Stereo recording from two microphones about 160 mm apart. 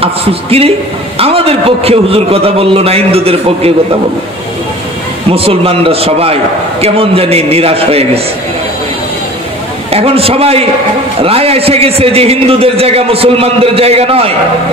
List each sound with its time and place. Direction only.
0.0 s a man's voice: 35° right (ahead or behind)
5.3 s a man's voice: 35° right (ahead or behind)
9.8 s a man's voice: 40° right (ahead or behind)